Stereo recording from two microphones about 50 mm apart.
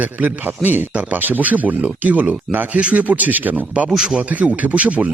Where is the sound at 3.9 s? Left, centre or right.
Centre.